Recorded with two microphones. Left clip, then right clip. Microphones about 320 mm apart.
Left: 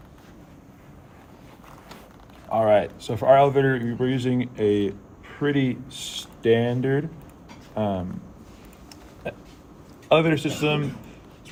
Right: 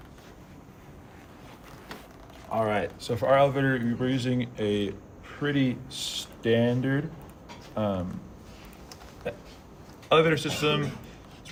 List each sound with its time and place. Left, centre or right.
2.5 s speech: left
10.1 s speech: left